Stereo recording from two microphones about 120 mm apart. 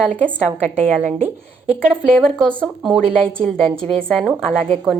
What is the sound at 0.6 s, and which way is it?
Speech, 85° right.